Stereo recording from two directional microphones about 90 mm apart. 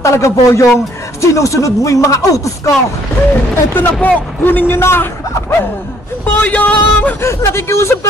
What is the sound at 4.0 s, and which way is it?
A man's voice, 20° left (ahead or behind).